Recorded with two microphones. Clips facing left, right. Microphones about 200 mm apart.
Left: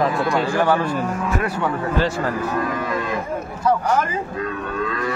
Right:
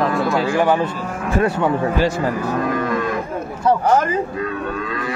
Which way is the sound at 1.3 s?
25° right (ahead or behind).